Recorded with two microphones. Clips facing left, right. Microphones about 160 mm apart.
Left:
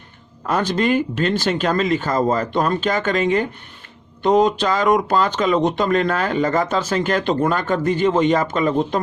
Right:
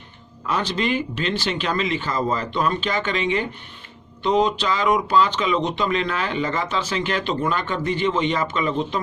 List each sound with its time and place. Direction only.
0.4 s speech: 45° left (ahead or behind)